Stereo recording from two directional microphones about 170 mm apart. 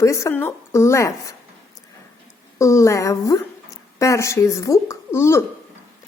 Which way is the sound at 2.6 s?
15° left (ahead or behind).